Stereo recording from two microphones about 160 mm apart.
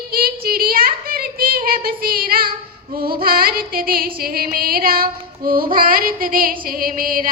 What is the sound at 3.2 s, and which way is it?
Female singing, 65° right (ahead or behind).